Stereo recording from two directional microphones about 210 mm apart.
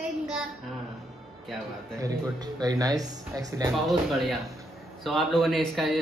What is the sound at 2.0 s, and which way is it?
Speech, 15° right (ahead or behind).